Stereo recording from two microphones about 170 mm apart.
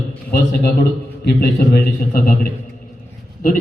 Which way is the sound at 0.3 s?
65° left (ahead or behind).